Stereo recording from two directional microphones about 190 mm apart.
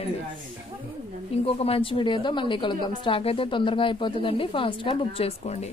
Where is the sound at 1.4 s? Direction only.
30° left (ahead or behind).